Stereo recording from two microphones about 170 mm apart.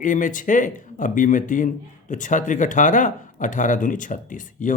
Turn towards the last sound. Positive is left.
turn(degrees=50)  # may be behind; listen again after turning